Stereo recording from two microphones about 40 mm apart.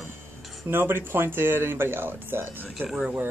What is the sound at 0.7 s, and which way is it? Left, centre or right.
Speech, right.